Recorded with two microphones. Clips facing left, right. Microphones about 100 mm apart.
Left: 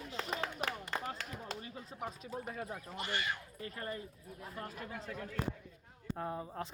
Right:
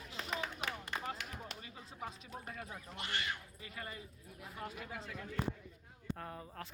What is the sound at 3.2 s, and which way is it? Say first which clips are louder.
Speech: left 3 dB; 45° left (ahead or behind).